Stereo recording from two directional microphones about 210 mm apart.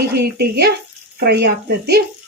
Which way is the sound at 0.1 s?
50° right (ahead or behind).